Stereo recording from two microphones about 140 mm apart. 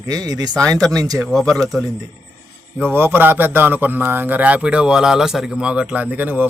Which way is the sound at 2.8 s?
15° right (ahead or behind).